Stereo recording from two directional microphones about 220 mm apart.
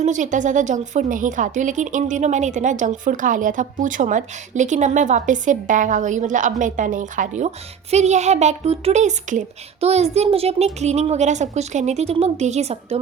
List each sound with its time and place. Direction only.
0.0 s a woman's voice: 35° right (ahead or behind)